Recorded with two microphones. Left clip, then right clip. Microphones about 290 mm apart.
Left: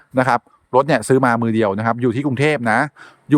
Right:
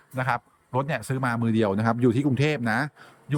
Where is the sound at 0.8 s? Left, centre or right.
Centre.